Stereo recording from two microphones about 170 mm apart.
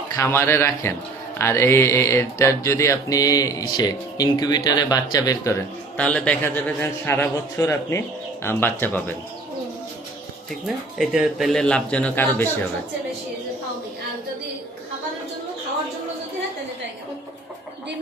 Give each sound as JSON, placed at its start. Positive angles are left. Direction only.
{"t": 0.2, "sound": "a man's voice", "side_deg": 15}
{"t": 6.0, "sound": "a man's voice", "side_deg": 5}
{"t": 10.9, "sound": "a man's voice", "side_deg": 0}